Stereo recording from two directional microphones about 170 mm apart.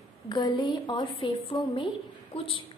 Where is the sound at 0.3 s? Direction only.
25° left (ahead or behind).